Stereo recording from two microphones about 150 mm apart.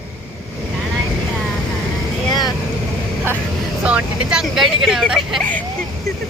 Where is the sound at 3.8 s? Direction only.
5° right (ahead or behind).